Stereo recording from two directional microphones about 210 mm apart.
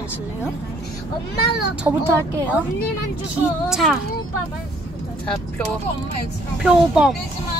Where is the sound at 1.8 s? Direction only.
15° right (ahead or behind).